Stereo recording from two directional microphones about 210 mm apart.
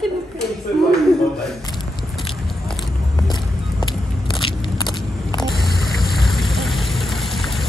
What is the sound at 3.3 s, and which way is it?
Vehicle, 20° left (ahead or behind).